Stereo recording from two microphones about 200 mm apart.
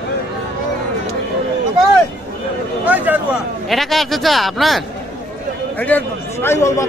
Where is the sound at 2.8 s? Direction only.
10° right (ahead or behind).